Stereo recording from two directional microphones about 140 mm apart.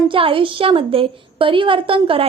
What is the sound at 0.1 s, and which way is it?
A woman's voice, 40° right (ahead or behind).